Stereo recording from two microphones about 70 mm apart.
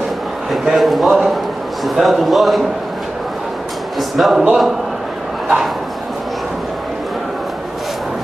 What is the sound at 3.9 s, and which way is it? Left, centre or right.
A man's voice, centre.